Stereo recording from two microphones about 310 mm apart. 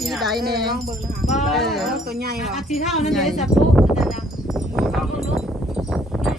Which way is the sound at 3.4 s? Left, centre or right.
Centre.